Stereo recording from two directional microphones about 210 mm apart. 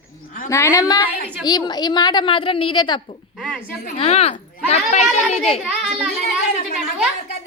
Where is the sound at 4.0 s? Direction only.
30° left (ahead or behind).